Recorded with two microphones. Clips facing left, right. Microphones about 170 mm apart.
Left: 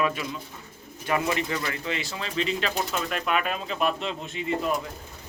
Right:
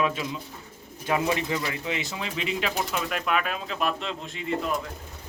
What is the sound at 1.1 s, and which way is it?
Speech, 15° right (ahead or behind).